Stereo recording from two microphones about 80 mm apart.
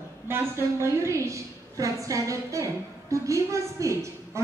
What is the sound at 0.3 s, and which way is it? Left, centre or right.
A woman's voice, right.